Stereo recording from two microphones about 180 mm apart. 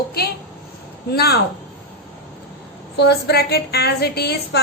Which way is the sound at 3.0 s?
65° left (ahead or behind).